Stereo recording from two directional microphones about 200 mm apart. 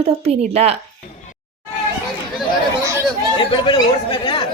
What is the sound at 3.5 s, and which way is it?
Speech, 25° left (ahead or behind).